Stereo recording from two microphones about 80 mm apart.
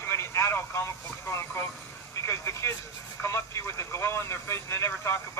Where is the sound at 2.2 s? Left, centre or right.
Left.